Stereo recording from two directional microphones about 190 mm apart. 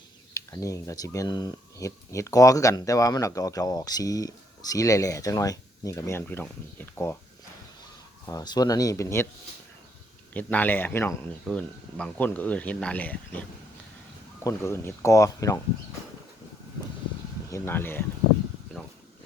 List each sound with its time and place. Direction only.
0.3 s speech: 15° left (ahead or behind)
8.3 s speech: 20° left (ahead or behind)
10.3 s speech: 10° left (ahead or behind)
17.5 s speech: 10° left (ahead or behind)